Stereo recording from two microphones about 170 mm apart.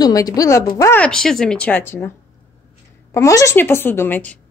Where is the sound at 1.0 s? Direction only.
5° left (ahead or behind).